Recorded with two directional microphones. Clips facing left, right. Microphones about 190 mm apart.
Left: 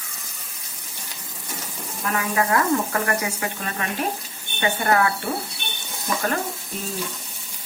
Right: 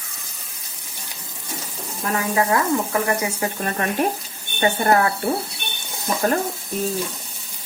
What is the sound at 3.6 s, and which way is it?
Frying, 45° right (ahead or behind).